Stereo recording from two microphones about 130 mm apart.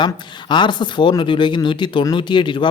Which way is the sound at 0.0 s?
35° left (ahead or behind).